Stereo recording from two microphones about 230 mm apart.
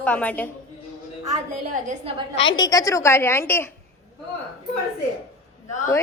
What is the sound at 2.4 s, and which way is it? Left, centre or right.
Speech, centre.